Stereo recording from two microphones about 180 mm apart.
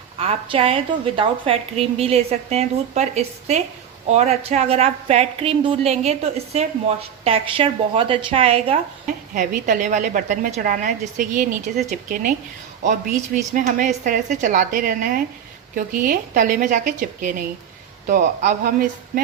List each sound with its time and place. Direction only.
0.2 s a woman's voice: 35° right (ahead or behind)
9.3 s a woman's voice: 45° right (ahead or behind)